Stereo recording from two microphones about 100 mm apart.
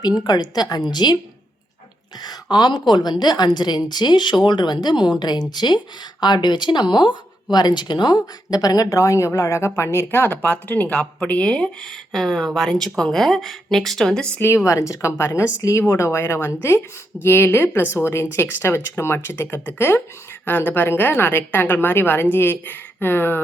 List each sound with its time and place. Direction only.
0.0 s a woman's voice: 40° left (ahead or behind)
2.2 s a woman's voice: 45° left (ahead or behind); by 14.4 s 10° left (ahead or behind)
14.4 s a woman's voice: 30° left (ahead or behind)